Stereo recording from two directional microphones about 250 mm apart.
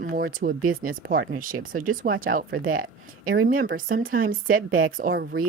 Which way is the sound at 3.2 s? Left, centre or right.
Right.